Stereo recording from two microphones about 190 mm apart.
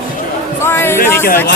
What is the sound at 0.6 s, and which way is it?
Speech, 15° left (ahead or behind).